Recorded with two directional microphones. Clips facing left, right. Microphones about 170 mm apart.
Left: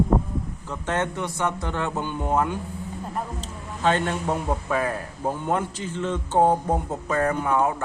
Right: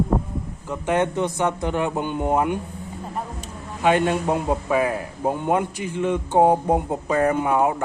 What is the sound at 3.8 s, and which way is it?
A man's voice, 15° right (ahead or behind).